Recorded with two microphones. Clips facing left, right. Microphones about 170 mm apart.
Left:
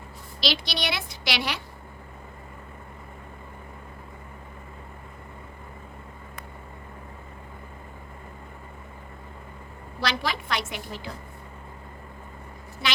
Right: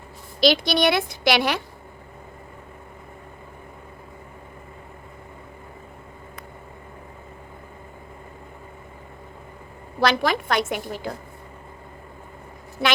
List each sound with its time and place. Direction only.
0.3 s a woman's voice: 50° right (ahead or behind)
10.0 s a woman's voice: 50° right (ahead or behind)